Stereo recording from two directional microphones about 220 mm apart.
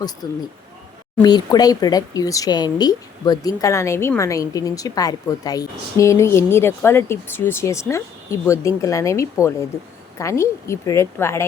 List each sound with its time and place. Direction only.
0.2 s speech: 20° left (ahead or behind)